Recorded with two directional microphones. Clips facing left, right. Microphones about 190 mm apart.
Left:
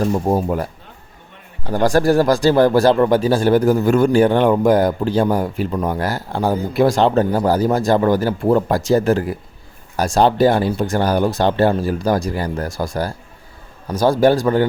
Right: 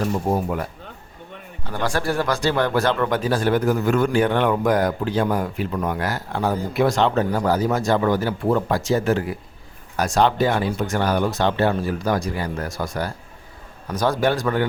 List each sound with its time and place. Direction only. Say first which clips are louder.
0.3 s speech: left 4 dB; 35° left (ahead or behind)